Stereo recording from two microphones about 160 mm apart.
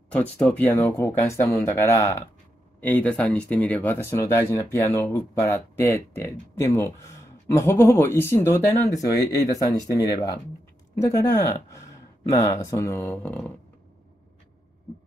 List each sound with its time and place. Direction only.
0.1 s speech: 5° left (ahead or behind)
13.2 s speech: 10° left (ahead or behind)